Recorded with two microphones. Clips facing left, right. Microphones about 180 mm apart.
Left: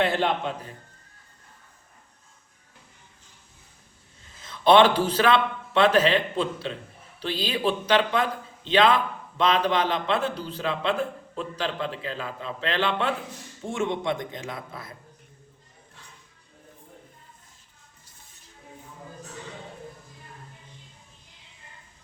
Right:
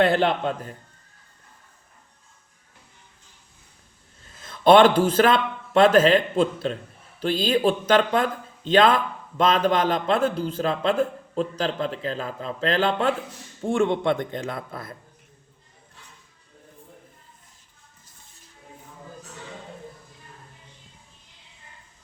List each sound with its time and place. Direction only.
0.0 s a man's voice: 55° right (ahead or behind)
4.4 s a man's voice: 45° right (ahead or behind)
13.7 s a man's voice: 55° right (ahead or behind)